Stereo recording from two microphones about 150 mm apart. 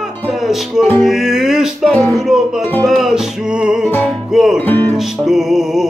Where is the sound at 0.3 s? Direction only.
Centre (ahead or behind).